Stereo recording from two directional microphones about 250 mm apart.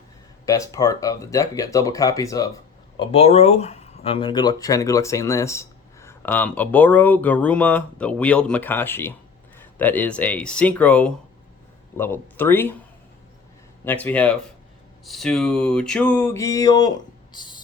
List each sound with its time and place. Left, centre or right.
0.4 s speech: centre
3.0 s speech: left
9.6 s a sound: centre
11.9 s speech: centre
13.8 s speech: centre
15.0 s a sound: centre
17.3 s speech: centre